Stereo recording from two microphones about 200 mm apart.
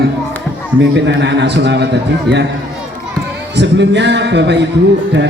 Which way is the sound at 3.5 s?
60° right (ahead or behind).